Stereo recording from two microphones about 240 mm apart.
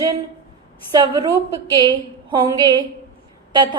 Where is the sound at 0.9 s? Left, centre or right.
Centre.